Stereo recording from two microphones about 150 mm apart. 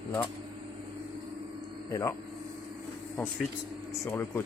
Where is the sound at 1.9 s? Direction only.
20° left (ahead or behind).